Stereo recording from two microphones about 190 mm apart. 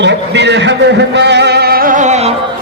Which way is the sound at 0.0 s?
65° right (ahead or behind).